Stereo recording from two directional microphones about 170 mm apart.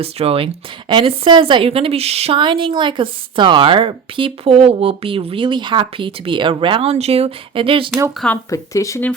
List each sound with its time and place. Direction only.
0.0 s speech: 35° right (ahead or behind)
8.4 s speech: 20° left (ahead or behind)